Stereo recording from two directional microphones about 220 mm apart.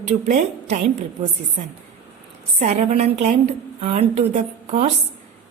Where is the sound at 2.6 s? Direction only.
35° right (ahead or behind).